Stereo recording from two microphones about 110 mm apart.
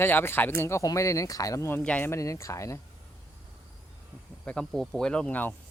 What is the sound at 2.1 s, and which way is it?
Speech, 25° left (ahead or behind).